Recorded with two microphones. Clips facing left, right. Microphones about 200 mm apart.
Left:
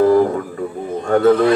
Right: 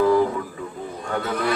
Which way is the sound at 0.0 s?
50° left (ahead or behind).